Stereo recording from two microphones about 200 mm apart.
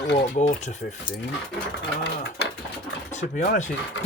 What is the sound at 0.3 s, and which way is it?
Speech, 35° left (ahead or behind).